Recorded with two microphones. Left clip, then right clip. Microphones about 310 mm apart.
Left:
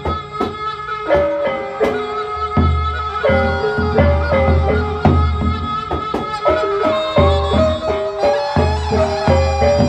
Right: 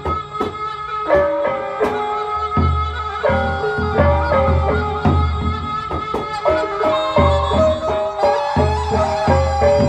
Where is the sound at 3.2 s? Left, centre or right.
Centre.